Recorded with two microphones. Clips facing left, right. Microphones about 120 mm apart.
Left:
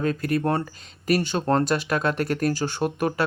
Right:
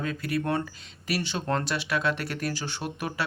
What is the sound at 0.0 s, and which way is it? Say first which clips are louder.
Speech: left 6 dB; 45° left (ahead or behind).